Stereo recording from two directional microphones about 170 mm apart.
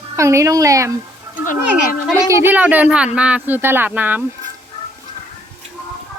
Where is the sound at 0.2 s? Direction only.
15° right (ahead or behind).